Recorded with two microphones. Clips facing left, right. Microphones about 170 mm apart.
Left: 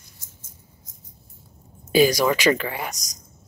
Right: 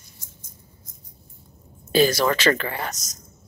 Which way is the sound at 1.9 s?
10° left (ahead or behind).